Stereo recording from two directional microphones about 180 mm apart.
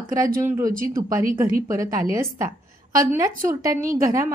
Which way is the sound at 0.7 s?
50° right (ahead or behind).